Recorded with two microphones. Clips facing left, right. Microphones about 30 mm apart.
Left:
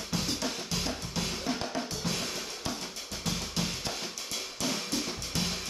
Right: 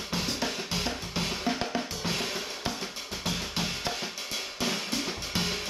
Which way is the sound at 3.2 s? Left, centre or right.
Right.